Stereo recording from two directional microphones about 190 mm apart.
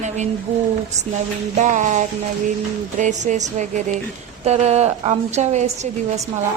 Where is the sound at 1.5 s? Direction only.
40° right (ahead or behind).